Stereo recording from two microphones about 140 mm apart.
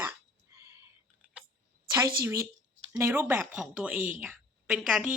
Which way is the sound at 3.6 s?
5° right (ahead or behind).